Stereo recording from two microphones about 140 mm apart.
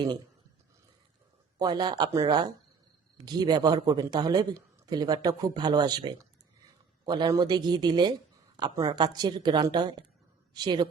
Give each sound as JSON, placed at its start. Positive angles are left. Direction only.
{"t": 1.5, "sound": "speech", "side_deg": -30}